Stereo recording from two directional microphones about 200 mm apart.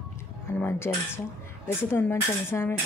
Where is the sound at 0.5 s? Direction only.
10° left (ahead or behind).